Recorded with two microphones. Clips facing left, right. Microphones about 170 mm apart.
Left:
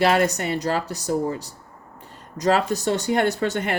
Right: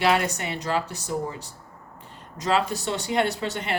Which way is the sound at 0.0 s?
45° left (ahead or behind).